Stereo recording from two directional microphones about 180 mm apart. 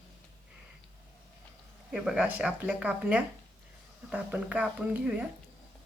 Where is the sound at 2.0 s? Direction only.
5° right (ahead or behind).